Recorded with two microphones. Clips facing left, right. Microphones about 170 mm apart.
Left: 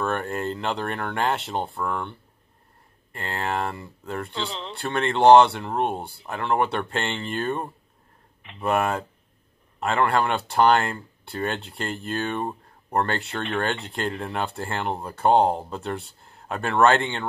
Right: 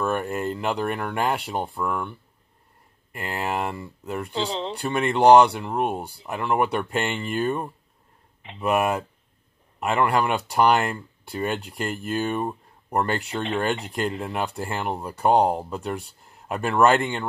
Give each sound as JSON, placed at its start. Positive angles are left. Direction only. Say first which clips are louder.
{"t": 0.0, "sound": "speech", "louder": "right 1 dB", "side_deg": -5}
{"t": 4.3, "sound": "speech", "louder": "right 5 dB", "side_deg": -30}
{"t": 4.7, "sound": "speech", "louder": "even", "side_deg": -5}